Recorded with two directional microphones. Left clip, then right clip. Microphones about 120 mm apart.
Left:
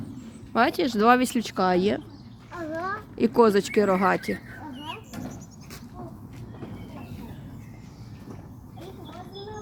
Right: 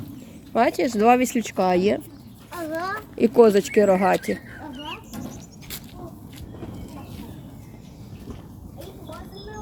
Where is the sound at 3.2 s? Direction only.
15° right (ahead or behind).